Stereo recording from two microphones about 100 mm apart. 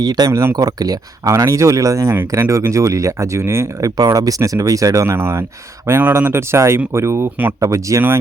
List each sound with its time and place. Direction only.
0.0 s speech: 40° right (ahead or behind)